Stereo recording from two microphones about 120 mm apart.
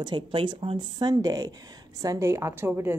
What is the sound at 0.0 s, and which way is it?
Speech, 40° right (ahead or behind).